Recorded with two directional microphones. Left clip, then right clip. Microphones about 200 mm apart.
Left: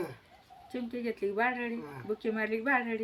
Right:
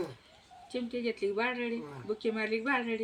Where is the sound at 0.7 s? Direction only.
15° left (ahead or behind).